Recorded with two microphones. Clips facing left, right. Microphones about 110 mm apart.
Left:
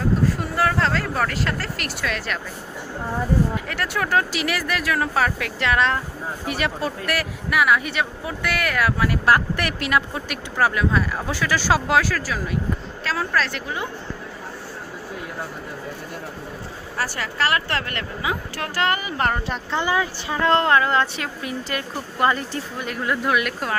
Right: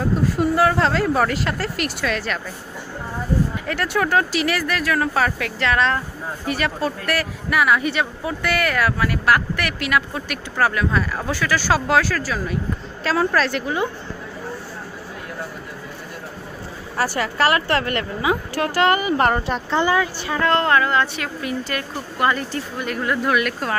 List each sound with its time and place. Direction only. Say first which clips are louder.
0.6 s speech: right 2 dB; 20° right (ahead or behind)
2.0 s speech: even; centre (ahead or behind)
3.6 s speech: right 4 dB; centre (ahead or behind)
17.0 s speech: right 5 dB; 10° right (ahead or behind)
19.5 s speech: right 4 dB; 5° left (ahead or behind)